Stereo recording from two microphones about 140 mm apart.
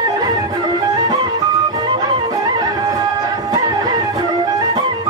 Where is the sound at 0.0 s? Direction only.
30° right (ahead or behind).